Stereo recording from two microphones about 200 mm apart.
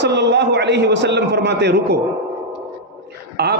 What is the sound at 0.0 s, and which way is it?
A man's voice, 60° right (ahead or behind).